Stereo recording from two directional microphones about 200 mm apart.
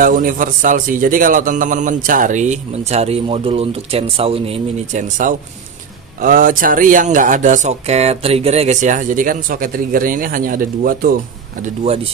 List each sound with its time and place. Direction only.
0.0 s a man's voice: 40° right (ahead or behind)
5.2 s a man's voice: 40° right (ahead or behind)
11.6 s a man's voice: 30° right (ahead or behind)